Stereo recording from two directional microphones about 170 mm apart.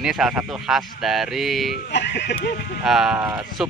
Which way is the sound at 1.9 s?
85° left.